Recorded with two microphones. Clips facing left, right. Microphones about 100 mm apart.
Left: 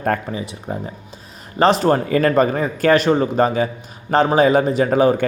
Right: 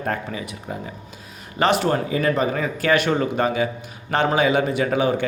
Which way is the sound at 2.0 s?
55° left (ahead or behind).